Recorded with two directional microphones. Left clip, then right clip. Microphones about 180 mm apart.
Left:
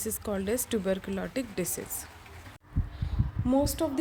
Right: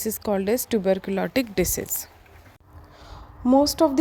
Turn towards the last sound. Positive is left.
turn(degrees=-40)  # may be behind; listen again after turning